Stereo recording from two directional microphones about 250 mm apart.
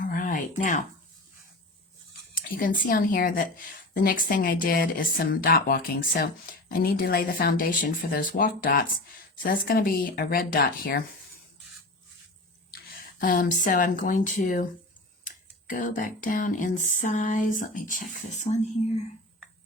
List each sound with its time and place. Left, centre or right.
0.0 s a sound: left
2.3 s speech: left
13.0 s speech: left